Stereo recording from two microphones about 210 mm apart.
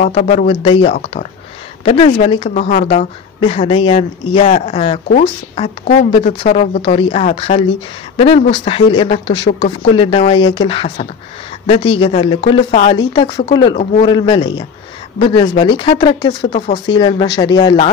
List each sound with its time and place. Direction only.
0.0 s speech: 35° left (ahead or behind)
2.5 s speech: 35° left (ahead or behind)
6.1 s speech: 30° left (ahead or behind)